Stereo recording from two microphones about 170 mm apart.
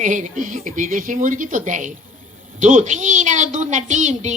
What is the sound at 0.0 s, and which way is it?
A man's voice, 50° right (ahead or behind).